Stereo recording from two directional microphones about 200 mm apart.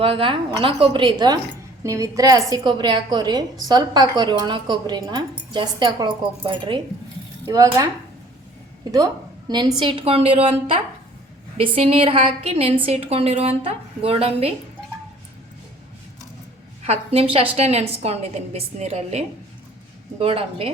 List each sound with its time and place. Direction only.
0.0 s a woman's voice: 25° right (ahead or behind)
16.8 s a woman's voice: 30° right (ahead or behind)